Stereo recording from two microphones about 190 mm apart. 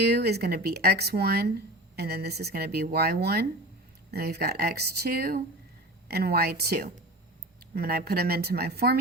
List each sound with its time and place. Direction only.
0.1 s speech: 55° right (ahead or behind)